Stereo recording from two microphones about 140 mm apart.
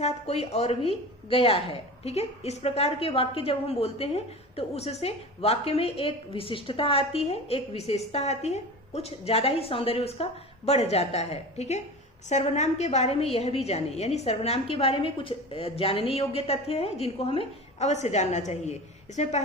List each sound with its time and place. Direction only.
0.0 s a woman's voice: 50° left (ahead or behind)